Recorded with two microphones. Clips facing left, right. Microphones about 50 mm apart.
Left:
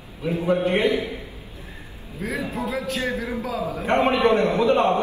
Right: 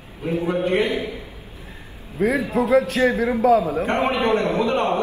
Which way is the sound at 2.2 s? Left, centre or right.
Right.